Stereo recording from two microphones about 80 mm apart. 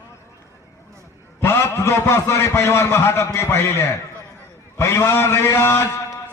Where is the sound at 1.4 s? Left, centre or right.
Left.